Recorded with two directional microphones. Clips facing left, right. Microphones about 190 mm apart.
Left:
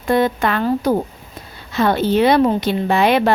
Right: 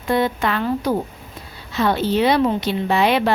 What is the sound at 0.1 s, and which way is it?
A woman's voice, 50° left (ahead or behind).